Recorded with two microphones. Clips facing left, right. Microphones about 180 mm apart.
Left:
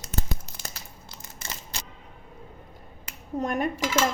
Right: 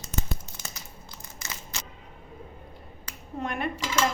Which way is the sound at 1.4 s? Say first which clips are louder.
Left 1 dB; 30° left (ahead or behind).